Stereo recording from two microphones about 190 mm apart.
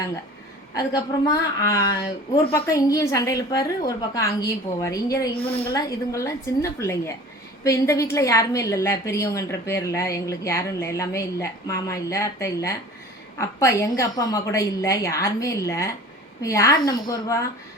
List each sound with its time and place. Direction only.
0.7 s a woman's voice: 20° left (ahead or behind)
2.5 s a woman's voice: 15° left (ahead or behind)